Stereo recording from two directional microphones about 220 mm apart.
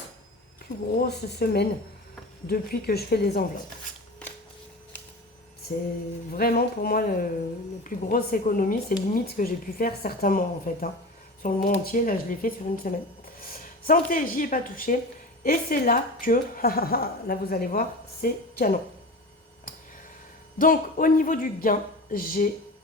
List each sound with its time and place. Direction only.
0.9 s a woman's voice: 45° left (ahead or behind)
6.3 s a woman's voice: 45° left (ahead or behind)
20.6 s speech: 40° left (ahead or behind)